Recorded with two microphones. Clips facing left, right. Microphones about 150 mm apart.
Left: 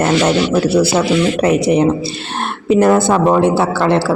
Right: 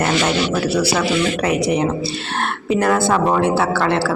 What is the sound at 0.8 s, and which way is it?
Speech, 25° left (ahead or behind).